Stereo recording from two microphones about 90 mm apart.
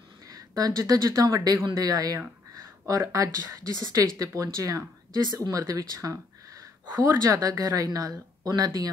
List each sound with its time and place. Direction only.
0.3 s speech: 45° right (ahead or behind)
1.8 s a sound: 45° right (ahead or behind)
3.2 s speech: 40° right (ahead or behind)
5.2 s a woman's voice: 50° right (ahead or behind)